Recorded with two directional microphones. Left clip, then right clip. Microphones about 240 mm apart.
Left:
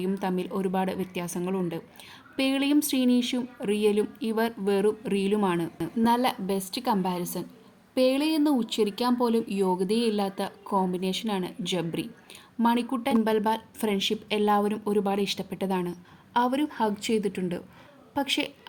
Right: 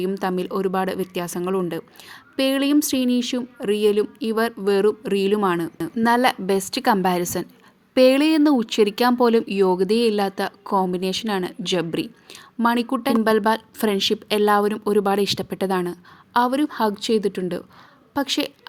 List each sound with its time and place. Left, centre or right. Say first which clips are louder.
0.0 s speech: right 6 dB; right